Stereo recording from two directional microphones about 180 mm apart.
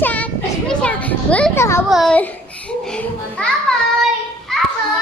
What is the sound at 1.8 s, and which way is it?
Speech, centre (ahead or behind).